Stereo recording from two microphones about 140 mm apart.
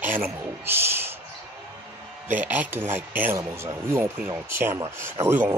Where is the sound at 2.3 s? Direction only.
10° right (ahead or behind).